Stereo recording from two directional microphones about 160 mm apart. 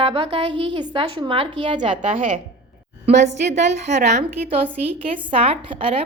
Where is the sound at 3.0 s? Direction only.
45° right (ahead or behind).